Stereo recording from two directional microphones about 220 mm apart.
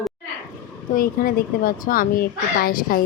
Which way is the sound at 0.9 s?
40° left (ahead or behind).